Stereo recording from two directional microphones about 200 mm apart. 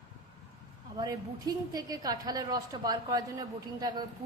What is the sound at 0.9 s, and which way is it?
A woman's voice, 20° right (ahead or behind).